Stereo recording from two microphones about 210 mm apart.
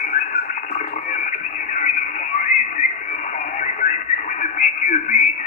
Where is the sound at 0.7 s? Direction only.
35° left (ahead or behind).